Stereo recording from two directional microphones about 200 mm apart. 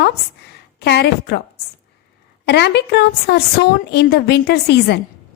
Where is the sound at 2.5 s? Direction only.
55° left (ahead or behind).